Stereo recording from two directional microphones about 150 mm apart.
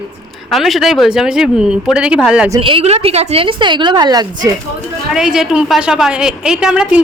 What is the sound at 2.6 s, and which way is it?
A woman's voice, 40° right (ahead or behind).